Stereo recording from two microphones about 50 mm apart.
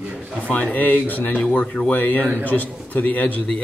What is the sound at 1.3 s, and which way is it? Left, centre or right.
Speech, left.